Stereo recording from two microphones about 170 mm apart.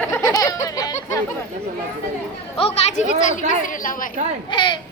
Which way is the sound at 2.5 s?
35° left (ahead or behind).